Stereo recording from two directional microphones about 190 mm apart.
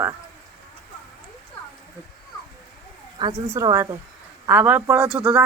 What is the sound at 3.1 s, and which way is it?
Speech, 20° right (ahead or behind).